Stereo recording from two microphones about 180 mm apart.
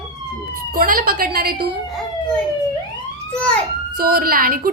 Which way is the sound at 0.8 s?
55° right (ahead or behind).